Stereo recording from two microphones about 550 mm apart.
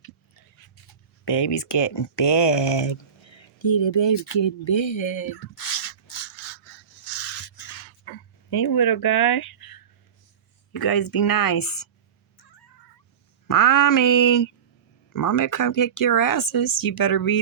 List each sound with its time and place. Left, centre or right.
1.2 s speech: left
6.1 s rub: left
8.0 s a sound: left
10.7 s speech: left
13.5 s speech: left